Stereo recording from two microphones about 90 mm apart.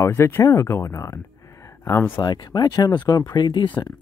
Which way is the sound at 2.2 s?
50° left (ahead or behind).